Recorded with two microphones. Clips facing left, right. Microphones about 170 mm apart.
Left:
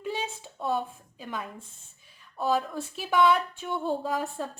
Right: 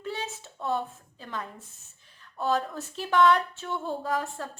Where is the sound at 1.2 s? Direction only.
10° left (ahead or behind).